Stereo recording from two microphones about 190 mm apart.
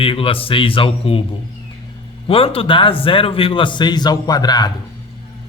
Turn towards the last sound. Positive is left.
turn(degrees=20)  # may be behind; listen again after turning